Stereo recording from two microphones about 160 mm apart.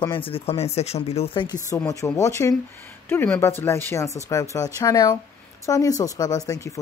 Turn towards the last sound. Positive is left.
turn(degrees=20)  # may be behind; listen again after turning